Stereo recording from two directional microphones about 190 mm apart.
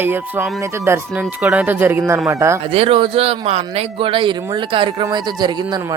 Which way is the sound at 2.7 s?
30° right (ahead or behind).